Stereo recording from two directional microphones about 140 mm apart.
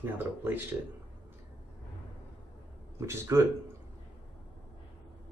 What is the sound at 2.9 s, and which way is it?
Speech, 20° right (ahead or behind).